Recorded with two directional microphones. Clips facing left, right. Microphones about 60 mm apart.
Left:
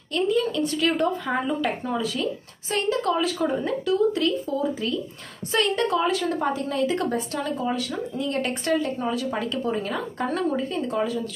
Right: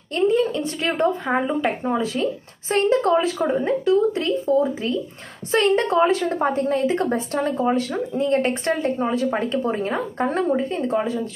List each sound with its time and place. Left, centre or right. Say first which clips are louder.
0.1 s a woman's voice: right 4 dB; right